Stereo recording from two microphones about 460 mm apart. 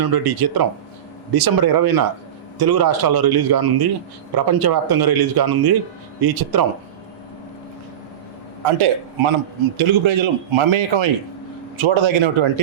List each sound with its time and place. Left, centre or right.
0.0 s speech: right
8.6 s a man's voice: right
9.7 s a man's voice: right